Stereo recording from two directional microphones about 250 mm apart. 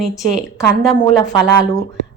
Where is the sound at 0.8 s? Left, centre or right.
Centre.